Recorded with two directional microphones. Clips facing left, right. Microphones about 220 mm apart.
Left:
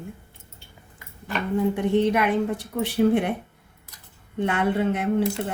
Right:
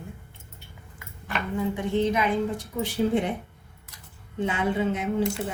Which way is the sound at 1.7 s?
65° left (ahead or behind).